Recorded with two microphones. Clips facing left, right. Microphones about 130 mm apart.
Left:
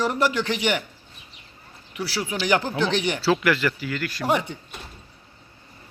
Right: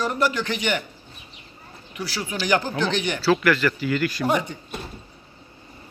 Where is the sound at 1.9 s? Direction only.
10° left (ahead or behind).